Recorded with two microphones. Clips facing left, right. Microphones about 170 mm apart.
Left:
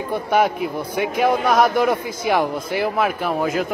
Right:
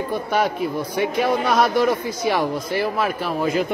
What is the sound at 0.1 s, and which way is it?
Speech, 55° left (ahead or behind).